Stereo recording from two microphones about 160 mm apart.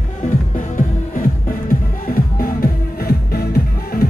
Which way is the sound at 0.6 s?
55° left (ahead or behind).